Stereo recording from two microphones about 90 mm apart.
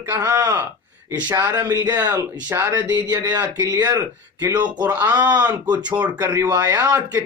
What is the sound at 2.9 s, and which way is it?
Speech, 50° right (ahead or behind).